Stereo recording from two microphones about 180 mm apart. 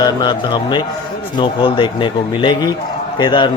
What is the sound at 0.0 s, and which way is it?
A man's voice, 25° left (ahead or behind).